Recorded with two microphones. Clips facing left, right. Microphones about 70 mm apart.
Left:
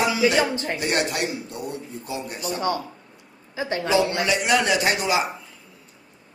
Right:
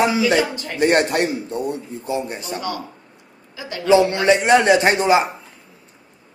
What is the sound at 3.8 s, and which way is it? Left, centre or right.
A man's voice, right.